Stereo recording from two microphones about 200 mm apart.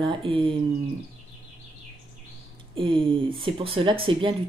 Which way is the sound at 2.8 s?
25° right (ahead or behind).